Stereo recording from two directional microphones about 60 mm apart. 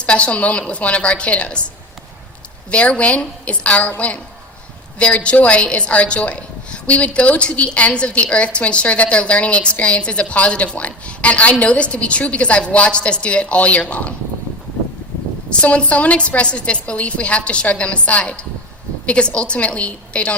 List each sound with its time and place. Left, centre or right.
0.0 s a woman's voice: left
2.6 s a woman's voice: centre
15.4 s a woman's voice: centre